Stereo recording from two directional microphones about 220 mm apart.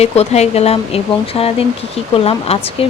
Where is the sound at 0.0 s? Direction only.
30° left (ahead or behind).